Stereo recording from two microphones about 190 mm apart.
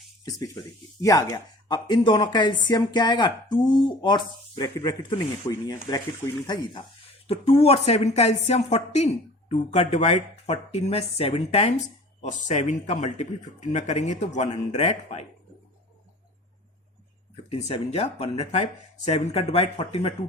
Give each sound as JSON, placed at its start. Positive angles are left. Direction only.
{"t": 0.3, "sound": "a woman's voice", "side_deg": 20}
{"t": 17.5, "sound": "a woman's voice", "side_deg": 35}